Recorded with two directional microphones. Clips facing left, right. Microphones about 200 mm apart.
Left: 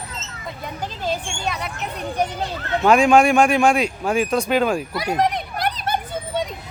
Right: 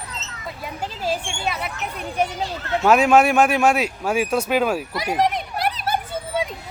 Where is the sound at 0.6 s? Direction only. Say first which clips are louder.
Even; 5° right (ahead or behind).